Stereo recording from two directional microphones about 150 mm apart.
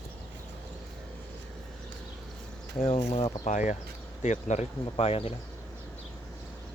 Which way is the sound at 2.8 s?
45° left (ahead or behind).